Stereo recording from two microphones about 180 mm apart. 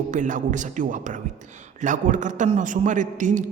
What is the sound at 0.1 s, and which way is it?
A man's voice, 45° right (ahead or behind).